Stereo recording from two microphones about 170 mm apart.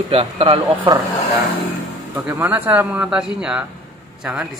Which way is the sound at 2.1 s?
10° right (ahead or behind).